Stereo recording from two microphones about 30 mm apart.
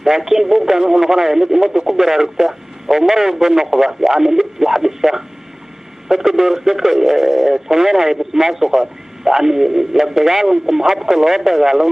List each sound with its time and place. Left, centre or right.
0.0 s speech: centre